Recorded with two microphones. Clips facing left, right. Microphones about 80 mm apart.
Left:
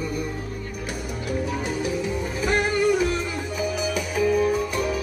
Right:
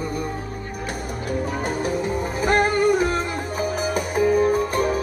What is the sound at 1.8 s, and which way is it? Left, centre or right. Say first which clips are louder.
Music: right 2 dB; right.